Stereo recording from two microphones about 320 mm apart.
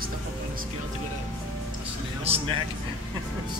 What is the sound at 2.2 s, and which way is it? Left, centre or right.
Speech, centre.